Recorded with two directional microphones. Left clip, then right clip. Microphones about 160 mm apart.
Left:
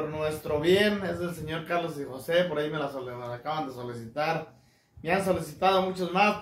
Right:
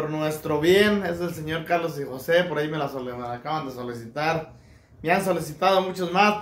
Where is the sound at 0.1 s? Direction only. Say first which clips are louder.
Right 4 dB; 35° right (ahead or behind).